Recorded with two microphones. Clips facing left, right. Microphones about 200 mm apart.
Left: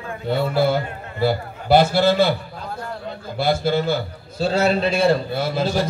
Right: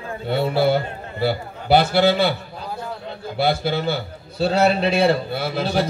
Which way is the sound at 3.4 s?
60° right (ahead or behind).